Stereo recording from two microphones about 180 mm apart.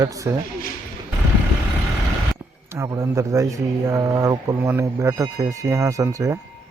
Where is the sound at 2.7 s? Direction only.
15° right (ahead or behind).